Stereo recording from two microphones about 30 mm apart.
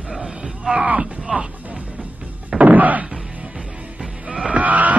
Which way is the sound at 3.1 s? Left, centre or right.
Centre.